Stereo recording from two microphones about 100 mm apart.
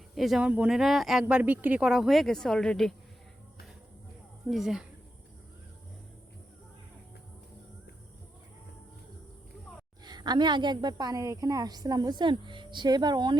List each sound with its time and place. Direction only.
0.1 s speech: centre (ahead or behind)
1.3 s speech: 15° right (ahead or behind)
1.9 s speech: centre (ahead or behind)
4.4 s speech: centre (ahead or behind)
10.0 s a woman's voice: 45° right (ahead or behind)